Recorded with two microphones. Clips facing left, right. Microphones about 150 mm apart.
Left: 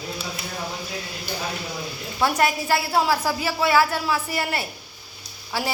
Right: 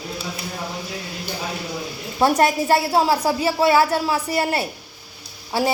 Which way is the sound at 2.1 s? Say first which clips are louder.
Right 5 dB; 30° right (ahead or behind).